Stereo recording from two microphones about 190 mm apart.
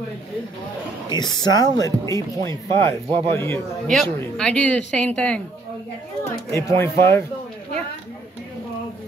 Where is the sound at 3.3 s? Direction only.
15° left (ahead or behind).